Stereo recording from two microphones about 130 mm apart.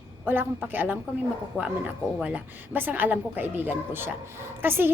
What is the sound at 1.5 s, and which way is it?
Speech, 15° left (ahead or behind).